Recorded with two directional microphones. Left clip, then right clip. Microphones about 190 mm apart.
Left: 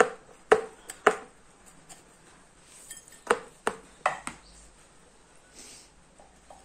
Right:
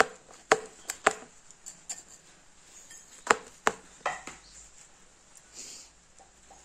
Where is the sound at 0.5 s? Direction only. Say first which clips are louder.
Left 3 dB; 25° right (ahead or behind).